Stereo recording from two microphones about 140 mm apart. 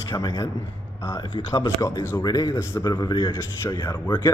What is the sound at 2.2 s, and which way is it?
A man's voice, 30° left (ahead or behind).